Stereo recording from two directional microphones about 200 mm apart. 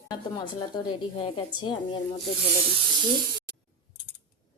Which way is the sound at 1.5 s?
25° left (ahead or behind).